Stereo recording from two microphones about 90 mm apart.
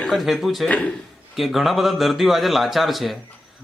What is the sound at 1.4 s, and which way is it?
Speech, centre (ahead or behind).